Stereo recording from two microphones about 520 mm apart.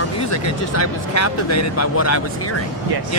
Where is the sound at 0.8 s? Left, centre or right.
Left.